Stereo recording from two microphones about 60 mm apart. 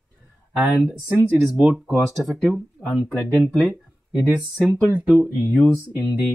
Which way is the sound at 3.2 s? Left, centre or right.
Centre.